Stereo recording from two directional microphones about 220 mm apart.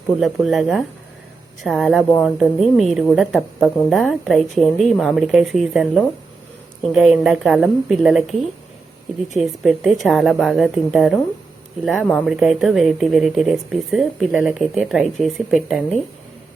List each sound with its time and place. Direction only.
0.2 s a woman's voice: centre (ahead or behind)
9.4 s a woman's voice: centre (ahead or behind)